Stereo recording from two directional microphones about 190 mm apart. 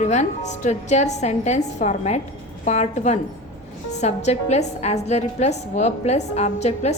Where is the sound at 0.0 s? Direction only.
40° left (ahead or behind).